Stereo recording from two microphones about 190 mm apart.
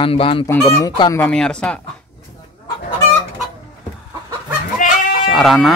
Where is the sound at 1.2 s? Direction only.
5° left (ahead or behind).